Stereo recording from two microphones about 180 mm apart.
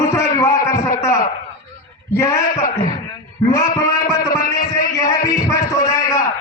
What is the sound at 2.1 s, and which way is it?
A man's voice, 20° left (ahead or behind).